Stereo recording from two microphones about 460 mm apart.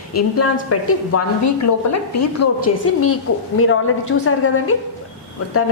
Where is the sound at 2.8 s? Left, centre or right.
Left.